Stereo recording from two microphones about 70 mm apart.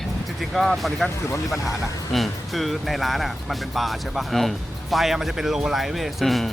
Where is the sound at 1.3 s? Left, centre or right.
Left.